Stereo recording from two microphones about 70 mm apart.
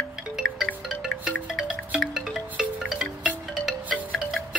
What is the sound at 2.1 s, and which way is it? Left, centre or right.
Music, centre.